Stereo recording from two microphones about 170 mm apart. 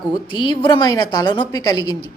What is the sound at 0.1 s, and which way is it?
Speech, 30° left (ahead or behind).